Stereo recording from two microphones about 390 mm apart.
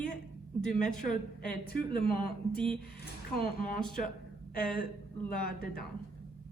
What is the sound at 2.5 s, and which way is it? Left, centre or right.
Speech, centre.